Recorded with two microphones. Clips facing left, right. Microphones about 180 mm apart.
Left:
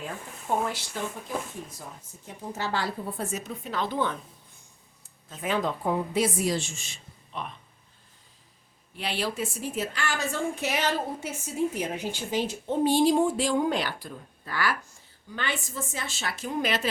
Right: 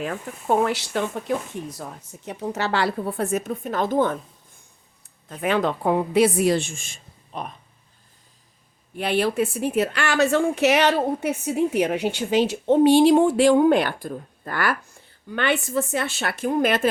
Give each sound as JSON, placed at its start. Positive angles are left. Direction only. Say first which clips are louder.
{"t": 0.0, "sound": "a woman's voice", "louder": "right 8 dB", "side_deg": -75}
{"t": 5.3, "sound": "a woman's voice", "louder": "right 6 dB", "side_deg": -65}
{"t": 9.0, "sound": "a woman's voice", "louder": "right 9 dB", "side_deg": -55}
{"t": 15.3, "sound": "a woman's voice", "louder": "right 10 dB", "side_deg": -65}